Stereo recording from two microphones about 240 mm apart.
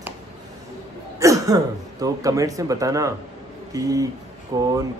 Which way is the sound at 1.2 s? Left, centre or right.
Centre.